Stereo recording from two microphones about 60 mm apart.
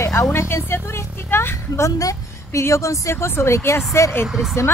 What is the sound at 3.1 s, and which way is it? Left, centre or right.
Speech, left.